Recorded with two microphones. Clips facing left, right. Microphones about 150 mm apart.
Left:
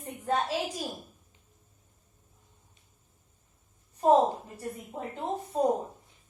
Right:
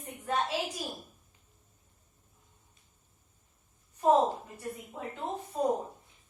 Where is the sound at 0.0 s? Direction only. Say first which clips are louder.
Left 3 dB; 35° left (ahead or behind).